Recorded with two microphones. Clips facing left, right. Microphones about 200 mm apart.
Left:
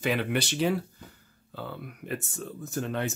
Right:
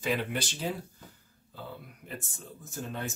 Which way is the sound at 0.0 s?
70° left (ahead or behind).